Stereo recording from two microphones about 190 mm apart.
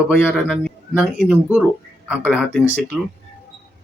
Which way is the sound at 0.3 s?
5° left (ahead or behind).